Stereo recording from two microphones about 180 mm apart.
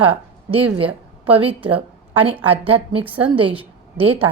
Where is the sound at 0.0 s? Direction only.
30° right (ahead or behind).